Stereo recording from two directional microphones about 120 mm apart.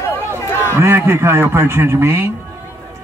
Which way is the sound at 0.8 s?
25° right (ahead or behind).